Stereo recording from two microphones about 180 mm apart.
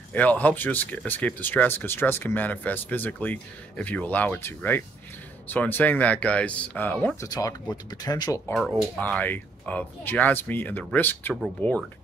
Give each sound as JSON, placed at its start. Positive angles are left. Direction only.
{"t": 0.1, "sound": "speech", "side_deg": 10}
{"t": 7.2, "sound": "speech", "side_deg": 20}
{"t": 8.5, "sound": "speech", "side_deg": 5}